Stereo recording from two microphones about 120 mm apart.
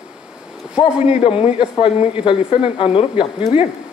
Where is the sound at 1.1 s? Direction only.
55° left (ahead or behind).